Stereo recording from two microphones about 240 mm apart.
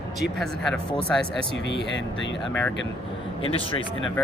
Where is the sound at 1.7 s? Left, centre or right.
Left.